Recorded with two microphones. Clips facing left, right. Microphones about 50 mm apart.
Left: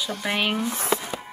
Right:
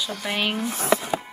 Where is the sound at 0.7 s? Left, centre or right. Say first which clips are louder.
Right 4 dB; right.